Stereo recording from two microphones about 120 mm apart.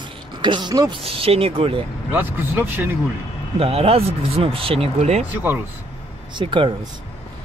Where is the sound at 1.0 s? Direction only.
55° right (ahead or behind).